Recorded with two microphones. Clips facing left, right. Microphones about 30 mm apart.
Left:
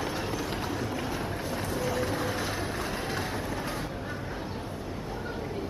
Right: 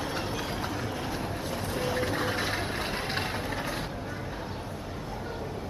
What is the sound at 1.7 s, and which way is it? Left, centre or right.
Vehicle, right.